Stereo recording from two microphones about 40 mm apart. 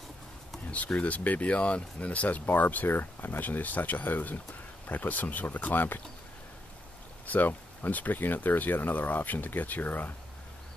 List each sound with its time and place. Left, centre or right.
0.7 s speech: left
7.2 s speech: left